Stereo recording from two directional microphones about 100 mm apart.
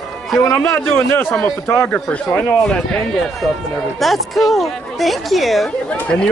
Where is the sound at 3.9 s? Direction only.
Centre (ahead or behind).